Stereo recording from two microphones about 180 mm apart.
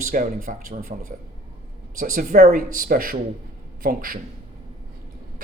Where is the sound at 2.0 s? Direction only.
50° right (ahead or behind).